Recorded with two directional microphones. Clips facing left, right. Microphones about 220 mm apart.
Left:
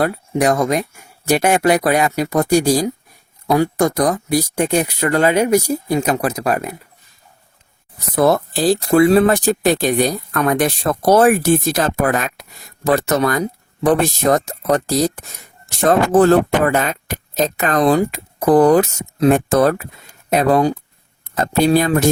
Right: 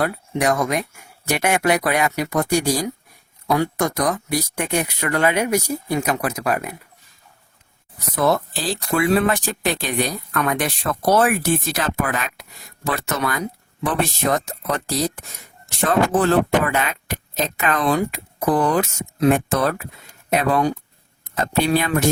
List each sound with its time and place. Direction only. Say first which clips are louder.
0.0 s speech: left 4 dB; 30° left (ahead or behind)
8.1 s speech: left 5 dB; 40° left (ahead or behind)